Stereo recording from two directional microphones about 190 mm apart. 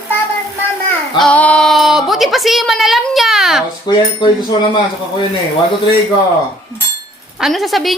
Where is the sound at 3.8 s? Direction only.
25° left (ahead or behind).